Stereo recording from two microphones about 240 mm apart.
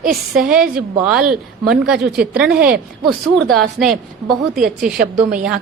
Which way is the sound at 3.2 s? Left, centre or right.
Centre.